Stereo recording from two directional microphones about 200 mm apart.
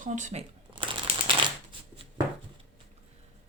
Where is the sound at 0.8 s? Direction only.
25° right (ahead or behind).